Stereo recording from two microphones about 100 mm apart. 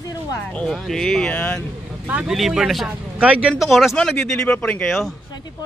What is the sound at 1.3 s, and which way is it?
Speech, 15° left (ahead or behind).